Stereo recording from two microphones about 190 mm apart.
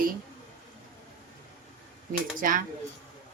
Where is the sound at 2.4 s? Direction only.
45° right (ahead or behind).